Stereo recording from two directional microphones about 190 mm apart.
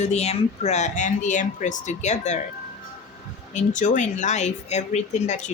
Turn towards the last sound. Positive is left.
turn(degrees=35)  # may be behind; listen again after turning